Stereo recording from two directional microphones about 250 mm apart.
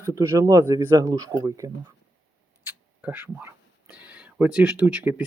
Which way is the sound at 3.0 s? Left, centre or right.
Centre.